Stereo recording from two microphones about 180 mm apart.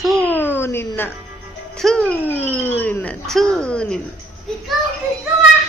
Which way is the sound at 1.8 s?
5° left (ahead or behind).